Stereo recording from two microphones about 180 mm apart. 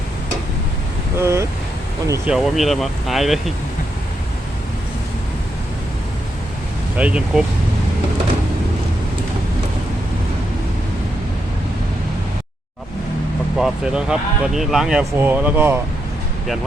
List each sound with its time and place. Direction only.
1.2 s a sound: 15° right (ahead or behind)
2.0 s speech: 15° right (ahead or behind)
2.3 s speech: centre (ahead or behind)
6.9 s speech: 5° right (ahead or behind)
13.6 s speech: 5° right (ahead or behind)